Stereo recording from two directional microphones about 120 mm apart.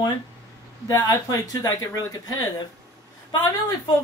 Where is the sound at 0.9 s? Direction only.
25° left (ahead or behind).